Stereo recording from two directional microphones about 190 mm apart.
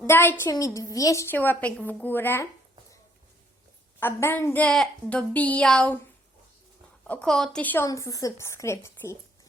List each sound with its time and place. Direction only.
0.1 s a woman's voice: 10° left (ahead or behind)
4.0 s a woman's voice: 10° left (ahead or behind)
7.1 s a woman's voice: 5° left (ahead or behind)